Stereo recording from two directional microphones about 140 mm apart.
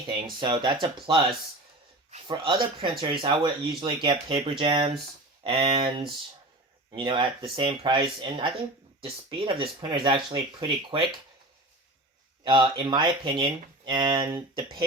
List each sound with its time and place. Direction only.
0.3 s speech: 35° right (ahead or behind)
12.5 s speech: 35° right (ahead or behind)